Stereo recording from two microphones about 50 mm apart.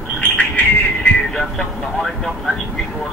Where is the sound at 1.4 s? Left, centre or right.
Centre.